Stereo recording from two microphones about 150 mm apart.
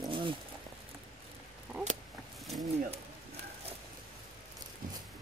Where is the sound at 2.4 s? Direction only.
Centre (ahead or behind).